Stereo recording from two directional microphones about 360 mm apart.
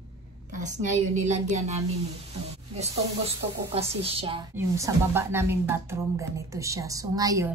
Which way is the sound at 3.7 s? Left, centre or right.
Centre.